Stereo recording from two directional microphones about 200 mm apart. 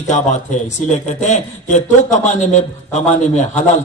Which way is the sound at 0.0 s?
35° left (ahead or behind).